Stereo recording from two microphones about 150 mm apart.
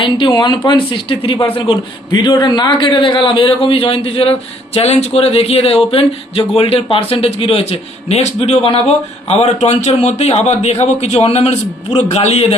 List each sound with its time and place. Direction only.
0.0 s a man's voice: 35° left (ahead or behind)